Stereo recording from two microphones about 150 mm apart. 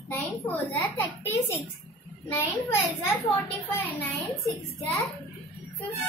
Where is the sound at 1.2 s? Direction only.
15° left (ahead or behind).